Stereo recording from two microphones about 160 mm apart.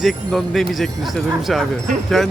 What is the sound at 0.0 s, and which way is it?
Speech, centre (ahead or behind).